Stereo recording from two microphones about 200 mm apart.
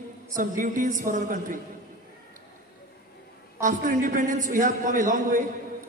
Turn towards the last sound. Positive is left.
turn(degrees=-40)  # may be behind; listen again after turning